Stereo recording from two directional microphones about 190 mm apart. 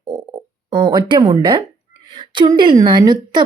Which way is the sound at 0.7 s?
25° right (ahead or behind).